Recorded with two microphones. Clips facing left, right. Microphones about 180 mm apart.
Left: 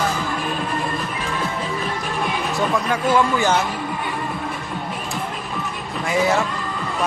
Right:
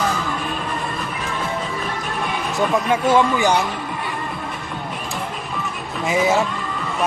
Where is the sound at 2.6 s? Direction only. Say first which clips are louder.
Right 4 dB; 20° right (ahead or behind).